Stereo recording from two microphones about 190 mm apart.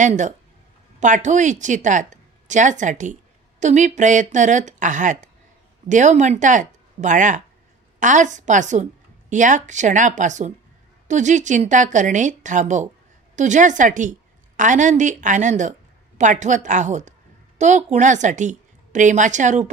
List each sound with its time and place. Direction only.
0.0 s a woman's voice: 40° right (ahead or behind)